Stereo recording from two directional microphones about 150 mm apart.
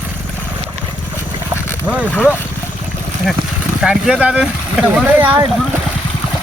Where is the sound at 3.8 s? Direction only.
5° right (ahead or behind).